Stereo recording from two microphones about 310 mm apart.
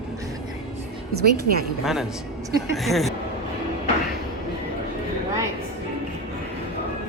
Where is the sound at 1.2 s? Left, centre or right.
Right.